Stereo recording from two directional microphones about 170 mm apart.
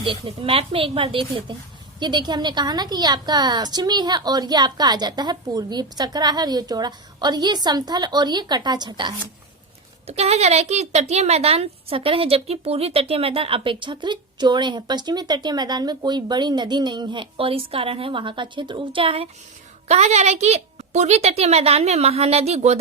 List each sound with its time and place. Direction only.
0.0 s a woman's voice: 30° right (ahead or behind)
10.1 s speech: 40° right (ahead or behind)